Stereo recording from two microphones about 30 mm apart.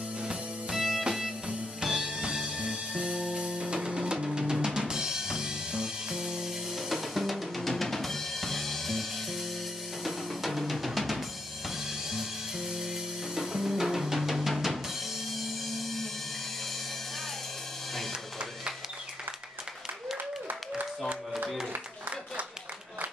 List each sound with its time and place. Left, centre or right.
0.7 s music: centre
2.4 s music: right
6.9 s drum kit: centre
10.0 s drum: centre
12.1 s music: centre
14.3 s drum: centre
15.3 s music: centre